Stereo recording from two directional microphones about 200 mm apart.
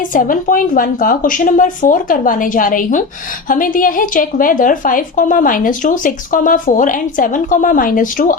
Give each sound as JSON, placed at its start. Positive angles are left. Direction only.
{"t": 0.1, "sound": "a woman's voice", "side_deg": 45}